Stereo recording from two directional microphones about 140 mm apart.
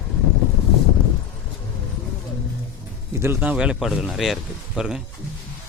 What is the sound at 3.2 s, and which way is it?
Speech, 15° right (ahead or behind).